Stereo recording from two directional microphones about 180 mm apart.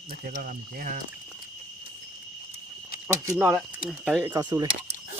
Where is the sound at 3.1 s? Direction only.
15° right (ahead or behind).